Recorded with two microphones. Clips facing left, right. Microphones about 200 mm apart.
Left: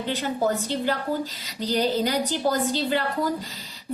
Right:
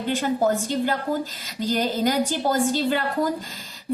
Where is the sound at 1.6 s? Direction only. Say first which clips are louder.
Right 1 dB; 50° right (ahead or behind).